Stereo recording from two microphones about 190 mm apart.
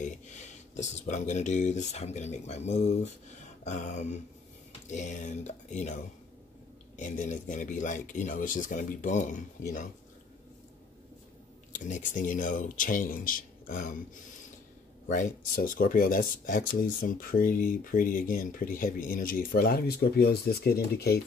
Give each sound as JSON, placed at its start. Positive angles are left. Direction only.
{"t": 0.0, "sound": "speech", "side_deg": 40}
{"t": 7.0, "sound": "speech", "side_deg": 40}
{"t": 11.7, "sound": "speech", "side_deg": 40}
{"t": 15.0, "sound": "speech", "side_deg": 40}